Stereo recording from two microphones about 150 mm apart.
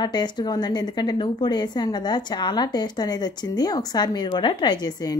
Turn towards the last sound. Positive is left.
turn(degrees=25)  # may be behind; listen again after turning